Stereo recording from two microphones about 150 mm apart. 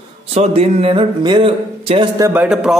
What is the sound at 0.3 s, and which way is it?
Speech, 45° right (ahead or behind).